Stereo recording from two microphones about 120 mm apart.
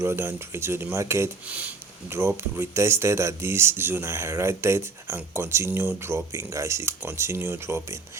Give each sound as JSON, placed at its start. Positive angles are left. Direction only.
{"t": 0.0, "sound": "speech", "side_deg": -20}